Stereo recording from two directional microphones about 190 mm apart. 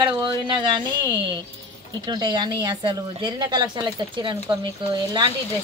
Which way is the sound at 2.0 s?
25° right (ahead or behind).